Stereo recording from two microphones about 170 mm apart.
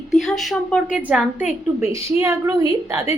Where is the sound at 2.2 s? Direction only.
20° right (ahead or behind).